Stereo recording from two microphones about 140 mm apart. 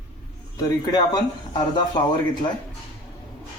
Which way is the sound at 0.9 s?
30° left (ahead or behind).